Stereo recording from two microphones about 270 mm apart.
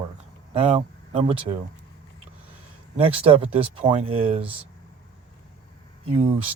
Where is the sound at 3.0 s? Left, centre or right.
Right.